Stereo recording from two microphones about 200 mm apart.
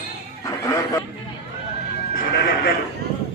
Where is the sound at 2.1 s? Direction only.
55° left (ahead or behind).